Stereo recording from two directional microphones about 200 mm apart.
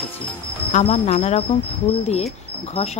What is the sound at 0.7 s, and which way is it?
Speech, 35° left (ahead or behind).